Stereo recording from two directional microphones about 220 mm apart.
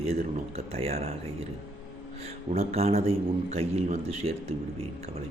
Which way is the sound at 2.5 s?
30° right (ahead or behind).